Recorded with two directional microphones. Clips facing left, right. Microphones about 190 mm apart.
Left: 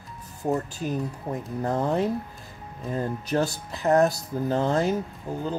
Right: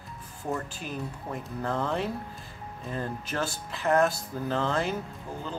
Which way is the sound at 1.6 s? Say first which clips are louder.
Left 5 dB; 40° left (ahead or behind).